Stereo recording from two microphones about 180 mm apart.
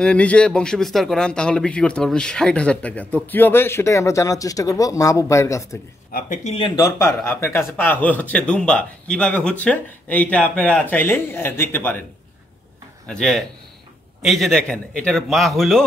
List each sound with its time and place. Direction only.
0.0 s speech: 5° left (ahead or behind)
6.1 s speech: 45° left (ahead or behind); by 12.0 s 10° left (ahead or behind)
13.0 s a man's voice: 5° left (ahead or behind)